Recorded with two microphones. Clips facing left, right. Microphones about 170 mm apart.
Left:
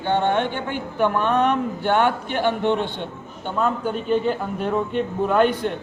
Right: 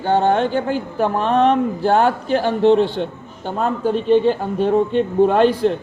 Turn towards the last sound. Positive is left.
turn(degrees=-30)  # may be behind; listen again after turning